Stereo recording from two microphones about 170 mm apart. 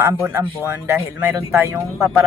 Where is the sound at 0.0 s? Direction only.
15° right (ahead or behind).